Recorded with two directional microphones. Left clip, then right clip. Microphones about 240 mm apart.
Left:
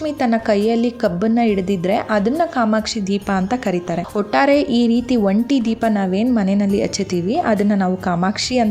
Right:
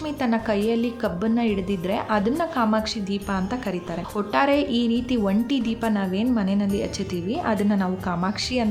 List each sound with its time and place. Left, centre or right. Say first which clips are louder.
0.2 s a woman's voice: left 7 dB; left